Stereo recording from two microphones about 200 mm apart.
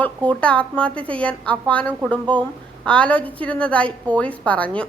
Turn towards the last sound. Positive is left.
turn(degrees=5)  # may be behind; listen again after turning